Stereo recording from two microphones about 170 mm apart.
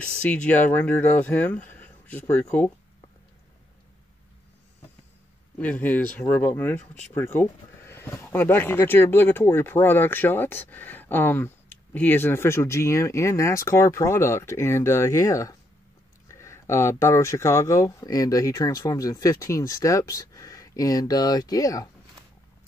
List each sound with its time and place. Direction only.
0.2 s speech: 10° left (ahead or behind)
5.6 s speech: 10° left (ahead or behind)